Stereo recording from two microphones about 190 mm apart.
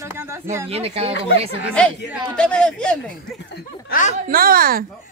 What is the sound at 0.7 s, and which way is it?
Speech, 30° right (ahead or behind).